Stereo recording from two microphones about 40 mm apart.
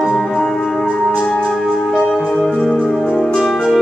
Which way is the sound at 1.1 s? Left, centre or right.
Left.